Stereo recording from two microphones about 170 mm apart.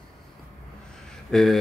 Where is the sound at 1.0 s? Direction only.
Centre (ahead or behind).